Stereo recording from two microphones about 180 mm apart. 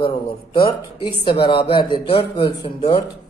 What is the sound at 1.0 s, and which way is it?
Speech, 25° left (ahead or behind).